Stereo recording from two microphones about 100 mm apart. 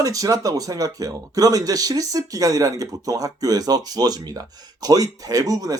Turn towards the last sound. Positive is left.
turn(degrees=-40)  # may be behind; listen again after turning